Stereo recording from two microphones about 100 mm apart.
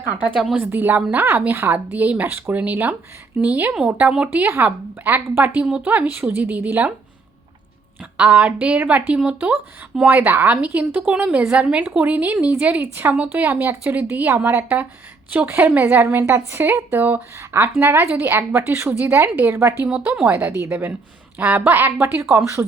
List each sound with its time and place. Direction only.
0.5 s a woman's voice: 20° right (ahead or behind)
8.2 s a woman's voice: 15° right (ahead or behind)